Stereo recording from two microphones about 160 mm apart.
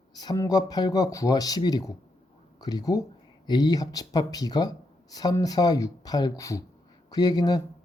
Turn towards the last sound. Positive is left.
turn(degrees=25)  # may be behind; listen again after turning